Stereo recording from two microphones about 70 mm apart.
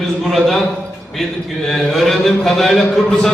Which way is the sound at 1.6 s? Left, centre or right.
Centre.